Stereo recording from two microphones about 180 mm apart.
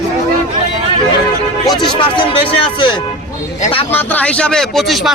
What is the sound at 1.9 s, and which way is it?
Speech, 25° left (ahead or behind).